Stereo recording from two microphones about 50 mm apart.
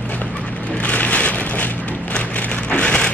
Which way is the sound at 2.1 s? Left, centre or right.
Left.